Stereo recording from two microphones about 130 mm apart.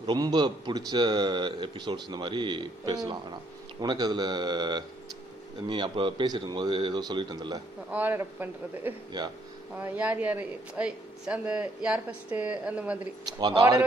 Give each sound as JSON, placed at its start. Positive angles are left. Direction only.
{"t": 0.0, "sound": "speech", "side_deg": -35}
{"t": 7.9, "sound": "speech", "side_deg": -15}
{"t": 13.2, "sound": "speech", "side_deg": -35}